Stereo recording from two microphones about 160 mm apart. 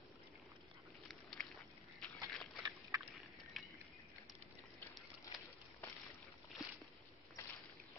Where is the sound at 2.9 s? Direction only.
5° right (ahead or behind).